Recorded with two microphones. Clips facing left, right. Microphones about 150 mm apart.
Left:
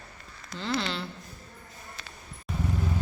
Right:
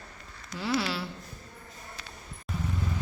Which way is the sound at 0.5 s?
10° right (ahead or behind).